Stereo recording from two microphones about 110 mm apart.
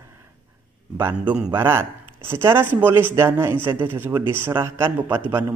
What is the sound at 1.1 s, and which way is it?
Speech, 10° right (ahead or behind).